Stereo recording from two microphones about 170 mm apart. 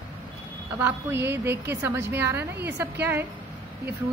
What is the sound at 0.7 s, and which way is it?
A woman's voice, 15° right (ahead or behind).